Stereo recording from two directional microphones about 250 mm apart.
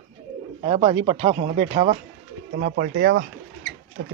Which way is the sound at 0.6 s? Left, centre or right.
Right.